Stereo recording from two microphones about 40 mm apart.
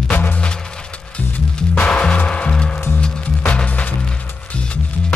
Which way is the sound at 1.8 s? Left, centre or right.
Left.